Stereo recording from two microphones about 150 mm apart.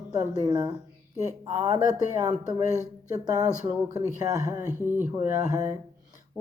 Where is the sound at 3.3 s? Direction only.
25° right (ahead or behind).